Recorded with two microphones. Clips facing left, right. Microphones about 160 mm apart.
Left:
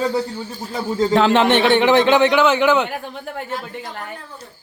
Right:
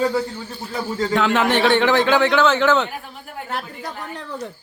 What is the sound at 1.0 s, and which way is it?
A man's voice, 30° left (ahead or behind).